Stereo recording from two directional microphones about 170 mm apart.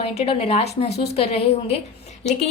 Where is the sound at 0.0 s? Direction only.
35° left (ahead or behind).